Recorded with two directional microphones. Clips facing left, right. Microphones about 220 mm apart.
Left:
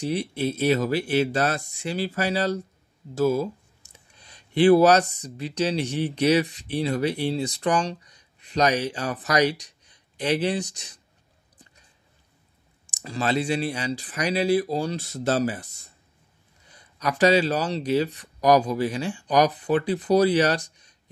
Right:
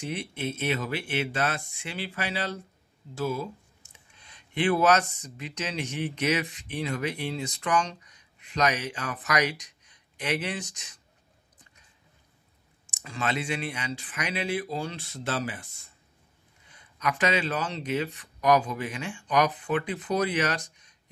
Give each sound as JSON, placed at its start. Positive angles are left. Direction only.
{"t": 0.0, "sound": "speech", "side_deg": 35}
{"t": 11.5, "sound": "a sound", "side_deg": 35}
{"t": 12.8, "sound": "speech", "side_deg": 35}